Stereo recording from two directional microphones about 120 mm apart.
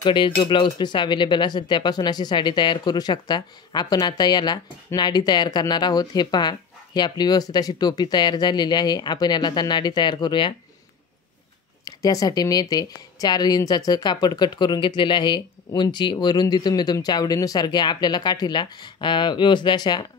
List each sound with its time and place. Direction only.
0.0 s speech: 45° left (ahead or behind)
11.8 s speech: 30° left (ahead or behind)